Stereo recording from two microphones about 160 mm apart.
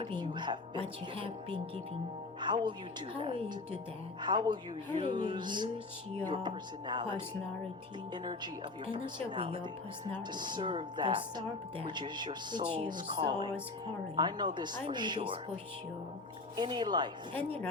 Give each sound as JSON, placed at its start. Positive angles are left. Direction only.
{"t": 0.0, "sound": "speech", "side_deg": -30}
{"t": 16.6, "sound": "speech", "side_deg": -30}